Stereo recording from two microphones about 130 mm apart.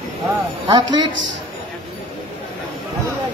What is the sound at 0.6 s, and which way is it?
Speech, 35° right (ahead or behind).